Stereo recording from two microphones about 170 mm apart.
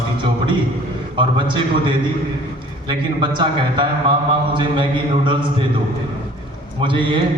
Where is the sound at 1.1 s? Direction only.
30° right (ahead or behind).